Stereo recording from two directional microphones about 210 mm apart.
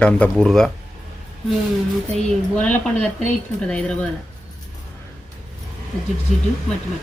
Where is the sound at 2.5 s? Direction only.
10° left (ahead or behind).